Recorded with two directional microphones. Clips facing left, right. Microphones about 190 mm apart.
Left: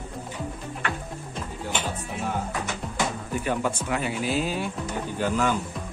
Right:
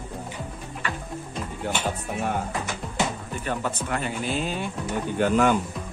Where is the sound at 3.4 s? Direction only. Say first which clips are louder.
Left 1 dB; 10° left (ahead or behind).